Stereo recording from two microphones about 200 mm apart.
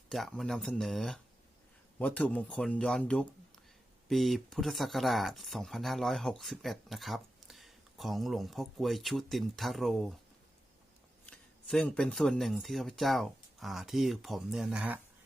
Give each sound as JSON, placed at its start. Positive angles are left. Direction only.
{"t": 0.1, "sound": "speech", "side_deg": 0}
{"t": 11.3, "sound": "speech", "side_deg": 5}